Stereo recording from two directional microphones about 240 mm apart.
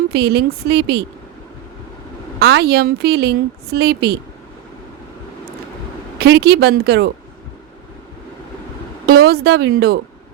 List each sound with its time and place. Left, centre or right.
0.1 s a woman's voice: right
2.4 s a woman's voice: right
6.1 s a woman's voice: right
9.0 s a woman's voice: right